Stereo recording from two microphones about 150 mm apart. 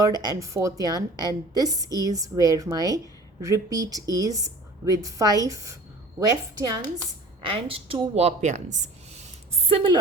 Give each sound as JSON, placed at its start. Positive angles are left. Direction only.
{"t": 0.0, "sound": "a woman's voice", "side_deg": -25}
{"t": 7.4, "sound": "speech", "side_deg": -40}